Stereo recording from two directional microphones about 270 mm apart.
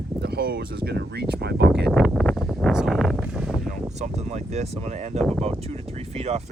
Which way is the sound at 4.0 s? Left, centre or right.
Right.